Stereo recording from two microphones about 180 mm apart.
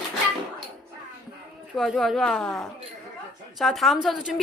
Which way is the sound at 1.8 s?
Centre (ahead or behind).